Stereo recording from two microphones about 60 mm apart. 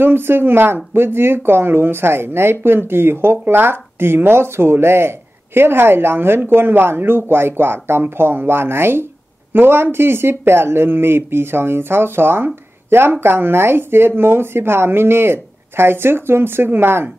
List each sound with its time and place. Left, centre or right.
0.0 s speech: right